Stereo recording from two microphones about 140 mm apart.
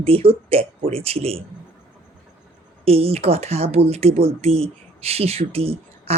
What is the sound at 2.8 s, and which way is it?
Speech, 45° right (ahead or behind).